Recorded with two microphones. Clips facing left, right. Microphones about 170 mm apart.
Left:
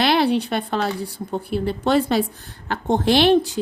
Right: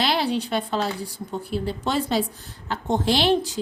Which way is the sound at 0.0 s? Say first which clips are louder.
Left 5 dB; 60° left (ahead or behind).